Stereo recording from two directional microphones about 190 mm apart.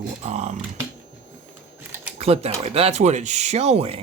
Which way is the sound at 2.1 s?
30° right (ahead or behind).